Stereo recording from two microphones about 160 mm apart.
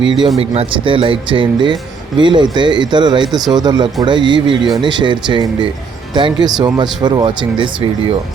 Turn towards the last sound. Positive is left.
turn(degrees=-30)  # may be behind; listen again after turning